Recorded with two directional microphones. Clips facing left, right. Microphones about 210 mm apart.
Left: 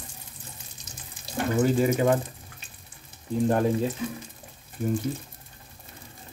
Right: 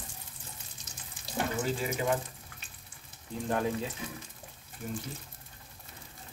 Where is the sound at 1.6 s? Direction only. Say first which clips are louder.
Left 14 dB; 55° left (ahead or behind).